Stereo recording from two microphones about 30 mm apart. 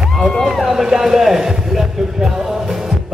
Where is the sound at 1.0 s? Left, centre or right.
Centre.